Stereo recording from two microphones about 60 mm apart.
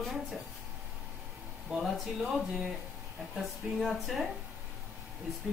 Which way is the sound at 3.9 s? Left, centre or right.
Centre.